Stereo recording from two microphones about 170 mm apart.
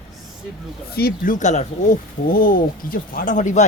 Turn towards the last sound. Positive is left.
turn(degrees=45)  # may be behind; listen again after turning